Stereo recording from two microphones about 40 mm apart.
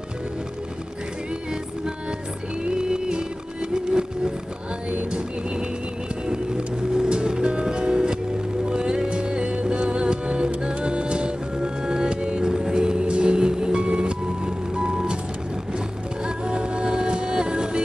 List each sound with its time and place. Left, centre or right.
2.6 s music: right
6.2 s music: centre
16.4 s music: right